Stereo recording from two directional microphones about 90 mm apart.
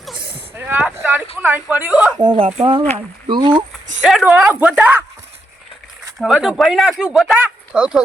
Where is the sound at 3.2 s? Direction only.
60° right (ahead or behind).